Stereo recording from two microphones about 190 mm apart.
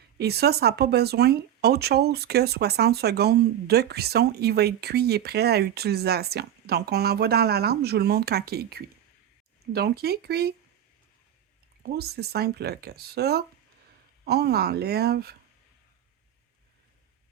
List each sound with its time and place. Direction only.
0.2 s speech: 60° right (ahead or behind)
11.8 s speech: 55° right (ahead or behind)